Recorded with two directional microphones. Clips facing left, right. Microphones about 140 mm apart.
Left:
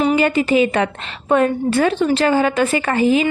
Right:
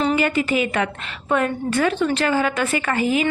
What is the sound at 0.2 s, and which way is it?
A woman's voice, 20° left (ahead or behind).